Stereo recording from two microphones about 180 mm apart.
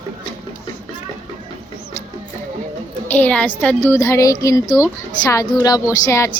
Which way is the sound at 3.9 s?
15° left (ahead or behind).